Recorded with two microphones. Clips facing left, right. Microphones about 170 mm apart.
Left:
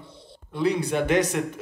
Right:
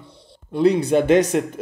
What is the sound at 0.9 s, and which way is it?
Speech, 20° right (ahead or behind).